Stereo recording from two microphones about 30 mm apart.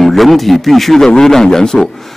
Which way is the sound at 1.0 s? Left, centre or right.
Centre.